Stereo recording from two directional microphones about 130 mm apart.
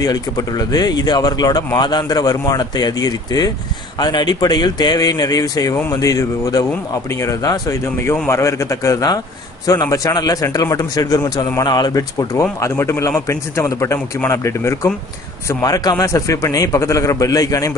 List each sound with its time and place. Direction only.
0.0 s a man's voice: 30° left (ahead or behind)